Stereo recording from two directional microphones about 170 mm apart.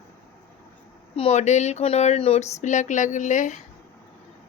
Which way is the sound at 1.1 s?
40° left (ahead or behind).